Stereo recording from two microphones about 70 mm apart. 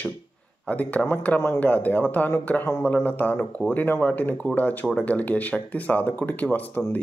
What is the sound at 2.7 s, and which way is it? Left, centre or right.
Speech, left.